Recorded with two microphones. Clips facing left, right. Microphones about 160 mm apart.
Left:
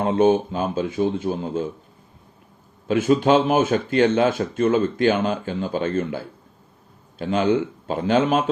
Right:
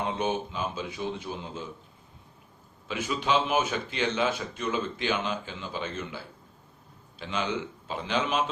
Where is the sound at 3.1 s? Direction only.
50° left (ahead or behind).